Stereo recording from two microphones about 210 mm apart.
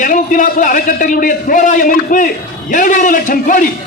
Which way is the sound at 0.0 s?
40° left (ahead or behind).